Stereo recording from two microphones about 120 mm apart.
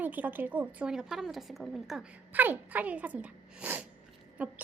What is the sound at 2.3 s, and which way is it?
Speech, 15° right (ahead or behind).